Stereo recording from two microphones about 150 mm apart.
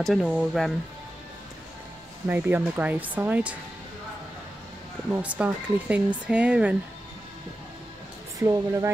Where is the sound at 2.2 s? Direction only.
10° right (ahead or behind).